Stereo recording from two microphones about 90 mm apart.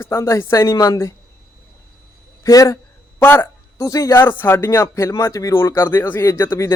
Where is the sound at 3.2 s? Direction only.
25° left (ahead or behind).